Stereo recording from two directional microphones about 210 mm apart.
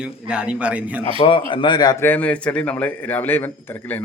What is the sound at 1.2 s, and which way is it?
A man's voice, 25° left (ahead or behind).